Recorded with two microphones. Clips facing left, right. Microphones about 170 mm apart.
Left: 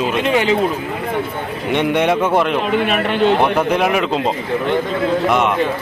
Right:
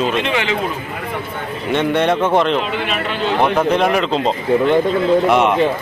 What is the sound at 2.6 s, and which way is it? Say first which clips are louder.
Speech: left 4 dB; 55° left (ahead or behind).